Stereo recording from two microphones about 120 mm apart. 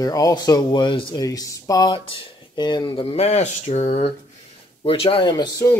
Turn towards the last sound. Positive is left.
turn(degrees=40)  # may be behind; listen again after turning